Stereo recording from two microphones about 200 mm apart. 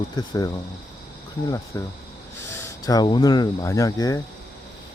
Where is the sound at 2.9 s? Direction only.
20° left (ahead or behind).